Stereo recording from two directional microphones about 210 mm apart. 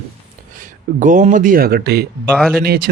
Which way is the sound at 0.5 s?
40° right (ahead or behind).